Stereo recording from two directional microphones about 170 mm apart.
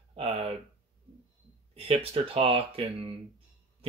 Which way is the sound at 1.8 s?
35° right (ahead or behind).